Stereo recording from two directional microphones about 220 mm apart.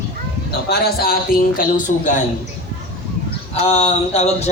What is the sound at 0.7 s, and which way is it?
A man's voice, 45° left (ahead or behind).